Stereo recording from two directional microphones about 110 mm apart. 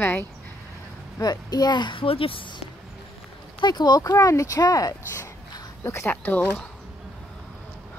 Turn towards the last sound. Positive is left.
turn(degrees=15)  # may be behind; listen again after turning